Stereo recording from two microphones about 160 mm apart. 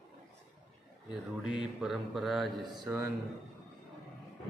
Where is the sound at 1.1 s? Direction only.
5° right (ahead or behind).